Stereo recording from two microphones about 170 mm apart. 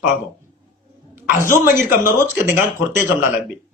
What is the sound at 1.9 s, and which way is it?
Speech, 15° right (ahead or behind).